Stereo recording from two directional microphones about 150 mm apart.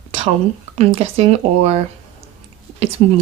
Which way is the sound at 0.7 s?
40° right (ahead or behind).